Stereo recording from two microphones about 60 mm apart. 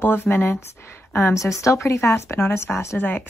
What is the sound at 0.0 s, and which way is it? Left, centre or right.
Speech, left.